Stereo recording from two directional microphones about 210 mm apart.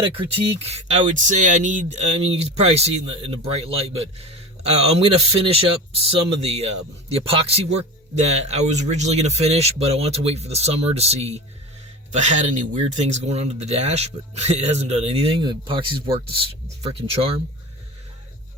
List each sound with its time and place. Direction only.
0.6 s speech: 30° right (ahead or behind)